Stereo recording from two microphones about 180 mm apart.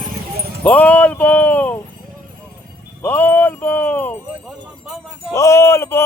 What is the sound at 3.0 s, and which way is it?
Speech, 10° left (ahead or behind).